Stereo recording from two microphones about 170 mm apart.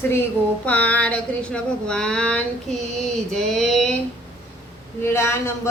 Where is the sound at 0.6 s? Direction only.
10° left (ahead or behind).